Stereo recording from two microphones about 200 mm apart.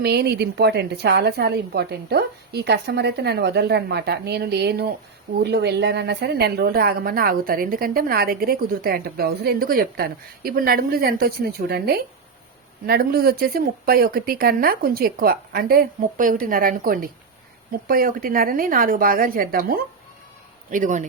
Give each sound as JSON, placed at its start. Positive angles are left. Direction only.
{"t": 0.0, "sound": "a woman's voice", "side_deg": -55}